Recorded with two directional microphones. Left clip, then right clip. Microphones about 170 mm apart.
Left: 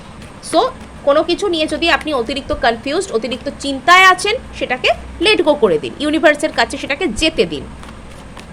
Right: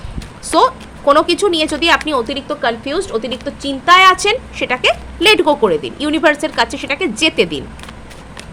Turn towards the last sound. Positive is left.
turn(degrees=-10)  # may be behind; listen again after turning